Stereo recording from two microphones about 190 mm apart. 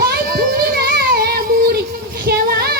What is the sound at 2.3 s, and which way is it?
Child singing, 55° right (ahead or behind).